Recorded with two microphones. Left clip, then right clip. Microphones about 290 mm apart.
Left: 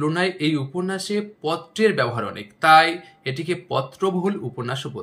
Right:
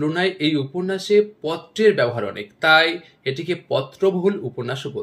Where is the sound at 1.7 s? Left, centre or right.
Centre.